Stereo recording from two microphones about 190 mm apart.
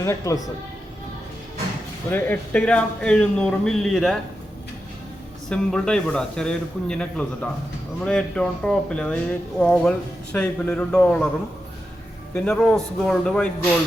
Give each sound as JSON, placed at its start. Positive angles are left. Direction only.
{"t": 0.0, "sound": "speech", "side_deg": 15}
{"t": 2.0, "sound": "a man's voice", "side_deg": 10}
{"t": 5.5, "sound": "a man's voice", "side_deg": 5}
{"t": 12.3, "sound": "a man's voice", "side_deg": 5}